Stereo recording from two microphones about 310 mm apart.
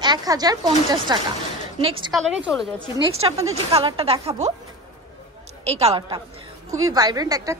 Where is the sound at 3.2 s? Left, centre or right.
Centre.